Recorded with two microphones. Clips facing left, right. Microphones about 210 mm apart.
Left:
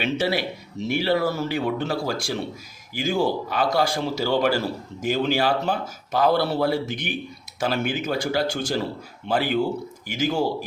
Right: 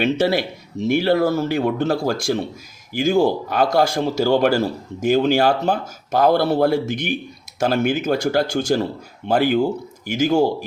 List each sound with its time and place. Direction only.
0.0 s a man's voice: 45° right (ahead or behind)